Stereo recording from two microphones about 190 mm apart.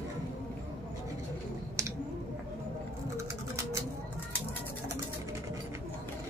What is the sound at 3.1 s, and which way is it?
Bird, 15° right (ahead or behind).